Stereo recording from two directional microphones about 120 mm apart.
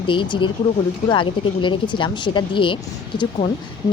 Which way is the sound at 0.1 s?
45° left (ahead or behind).